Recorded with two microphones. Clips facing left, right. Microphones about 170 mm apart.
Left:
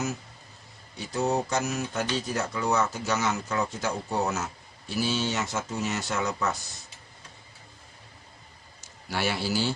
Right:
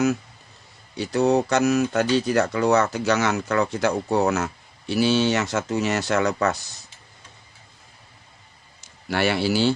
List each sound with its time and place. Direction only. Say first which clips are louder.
0.9 s speech: right 7 dB; 70° right (ahead or behind)
9.0 s speech: right 7 dB; 65° right (ahead or behind)